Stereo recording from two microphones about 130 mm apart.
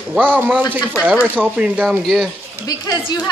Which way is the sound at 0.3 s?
10° right (ahead or behind).